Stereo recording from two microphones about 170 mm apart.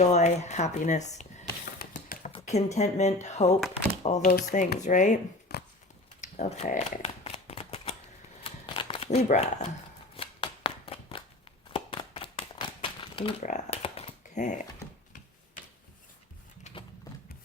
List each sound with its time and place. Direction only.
0.0 s speech: 40° left (ahead or behind)
1.8 s typing: 60° left (ahead or behind)
2.4 s speech: 40° left (ahead or behind)
5.5 s a sound: 70° left (ahead or behind)
6.2 s speech: 45° left (ahead or behind)
6.7 s shuffling cards: 35° left (ahead or behind)
11.7 s a sound: 30° left (ahead or behind)
13.4 s speech: 50° left (ahead or behind)
13.8 s typing: 35° left (ahead or behind)
16.7 s a sound: 40° left (ahead or behind)